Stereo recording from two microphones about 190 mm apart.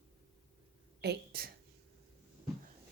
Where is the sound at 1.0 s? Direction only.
55° right (ahead or behind).